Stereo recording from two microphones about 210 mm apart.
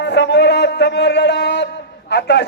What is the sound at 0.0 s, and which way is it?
Speech, 55° left (ahead or behind).